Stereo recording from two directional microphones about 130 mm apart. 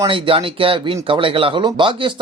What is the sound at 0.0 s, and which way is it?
Speech, 45° right (ahead or behind).